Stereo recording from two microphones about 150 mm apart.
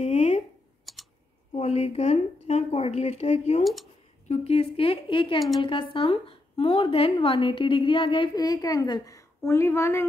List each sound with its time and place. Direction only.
0.0 s a sound: 45° left (ahead or behind)
0.9 s typing: centre (ahead or behind)
1.5 s a woman's voice: 45° left (ahead or behind); by 10.0 s 15° left (ahead or behind)